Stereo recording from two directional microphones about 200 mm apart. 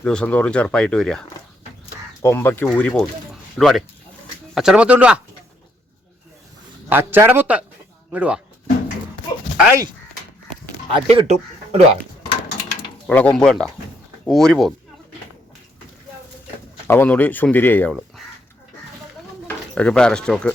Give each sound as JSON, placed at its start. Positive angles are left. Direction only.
{"t": 0.0, "sound": "speech", "side_deg": 5}
{"t": 2.2, "sound": "speech", "side_deg": 10}
{"t": 6.8, "sound": "speech", "side_deg": -10}
{"t": 10.8, "sound": "speech", "side_deg": -30}
{"t": 13.1, "sound": "speech", "side_deg": 5}
{"t": 16.8, "sound": "speech", "side_deg": 10}
{"t": 19.5, "sound": "speech", "side_deg": 5}